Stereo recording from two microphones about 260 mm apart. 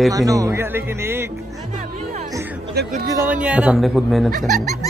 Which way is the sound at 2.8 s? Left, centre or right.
Right.